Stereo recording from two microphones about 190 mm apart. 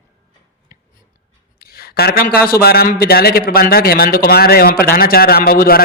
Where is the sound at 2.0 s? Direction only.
55° left (ahead or behind).